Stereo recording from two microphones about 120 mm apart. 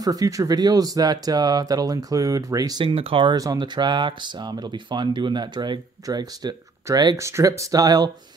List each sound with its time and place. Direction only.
0.0 s speech: 30° right (ahead or behind)
2.8 s speech: 50° right (ahead or behind)
3.3 s speech: 35° right (ahead or behind)
7.2 s speech: 25° right (ahead or behind)